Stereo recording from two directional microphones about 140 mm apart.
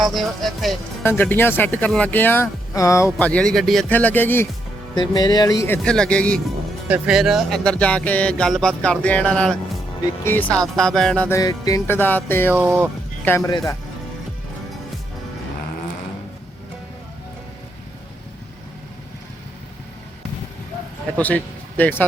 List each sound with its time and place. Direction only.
0.0 s speech: centre (ahead or behind)
1.0 s speech: 15° left (ahead or behind)
3.2 s speech: 10° left (ahead or behind)
3.8 s speech: 10° left (ahead or behind)
4.9 s speech: 30° left (ahead or behind); by 6.4 s 5° left (ahead or behind)
6.8 s speech: 5° right (ahead or behind)
11.3 s music: 25° left (ahead or behind)
11.9 s speech: 15° left (ahead or behind)
12.5 s speech: 15° right (ahead or behind)
13.2 s speech: 15° left (ahead or behind)
13.5 s music: 30° left (ahead or behind)
21.2 s speech: 10° left (ahead or behind)